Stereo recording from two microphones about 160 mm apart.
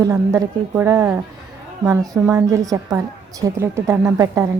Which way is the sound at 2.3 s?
20° right (ahead or behind).